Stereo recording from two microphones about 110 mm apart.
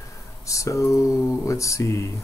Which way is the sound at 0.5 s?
30° left (ahead or behind).